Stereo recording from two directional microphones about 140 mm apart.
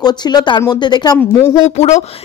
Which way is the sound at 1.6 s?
55° left (ahead or behind).